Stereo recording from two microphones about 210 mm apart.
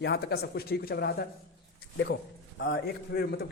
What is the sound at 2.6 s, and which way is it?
Speech, 55° left (ahead or behind).